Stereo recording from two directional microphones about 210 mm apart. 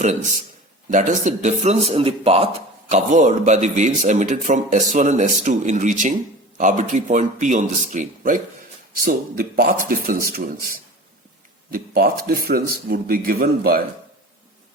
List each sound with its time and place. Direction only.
0.9 s a man's voice: 35° right (ahead or behind)